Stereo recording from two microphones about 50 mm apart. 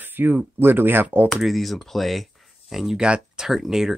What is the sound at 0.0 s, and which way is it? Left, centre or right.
Speech, right.